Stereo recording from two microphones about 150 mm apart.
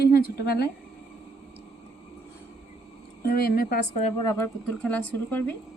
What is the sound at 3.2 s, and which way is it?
Speech, 90° left.